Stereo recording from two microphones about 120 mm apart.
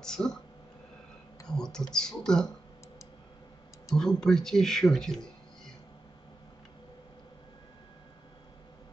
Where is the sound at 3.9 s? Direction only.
5° left (ahead or behind).